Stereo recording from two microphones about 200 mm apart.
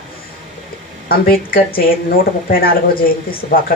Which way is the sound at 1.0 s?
45° left (ahead or behind).